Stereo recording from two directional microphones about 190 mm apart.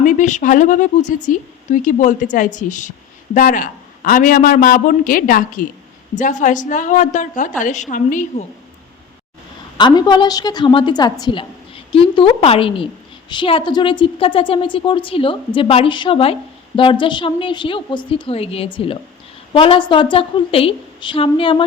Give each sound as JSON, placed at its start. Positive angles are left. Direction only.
{"t": 0.0, "sound": "a woman's voice", "side_deg": 40}
{"t": 9.7, "sound": "a woman's voice", "side_deg": 20}